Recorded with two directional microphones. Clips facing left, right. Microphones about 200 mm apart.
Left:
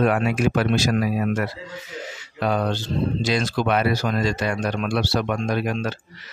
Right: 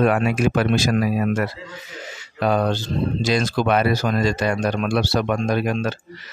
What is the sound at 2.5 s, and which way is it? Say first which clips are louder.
Speech: right 3 dB; 45° right (ahead or behind).